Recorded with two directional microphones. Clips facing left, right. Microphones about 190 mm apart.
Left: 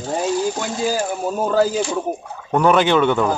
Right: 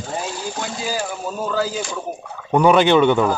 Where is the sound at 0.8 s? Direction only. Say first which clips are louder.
Left 6 dB; 45° left (ahead or behind).